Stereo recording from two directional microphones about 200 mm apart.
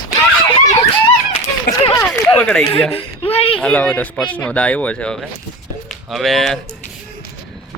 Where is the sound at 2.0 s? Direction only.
5° left (ahead or behind).